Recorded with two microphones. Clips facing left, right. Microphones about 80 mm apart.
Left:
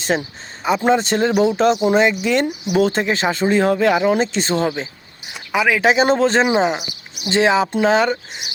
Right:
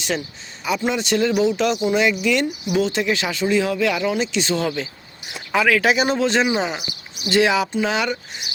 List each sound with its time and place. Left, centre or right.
0.0 s speech: left
5.5 s speech: centre; by 8.2 s left